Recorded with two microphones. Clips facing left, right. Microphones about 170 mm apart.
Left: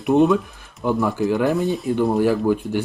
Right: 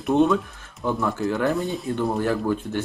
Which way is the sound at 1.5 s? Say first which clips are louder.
Left 5 dB; centre (ahead or behind).